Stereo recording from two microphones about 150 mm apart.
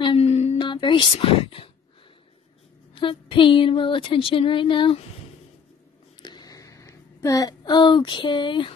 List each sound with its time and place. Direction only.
0.0 s music: 40° left (ahead or behind)
0.7 s speech: 30° left (ahead or behind)
2.9 s speech: 35° left (ahead or behind)
6.2 s a sound: 25° left (ahead or behind)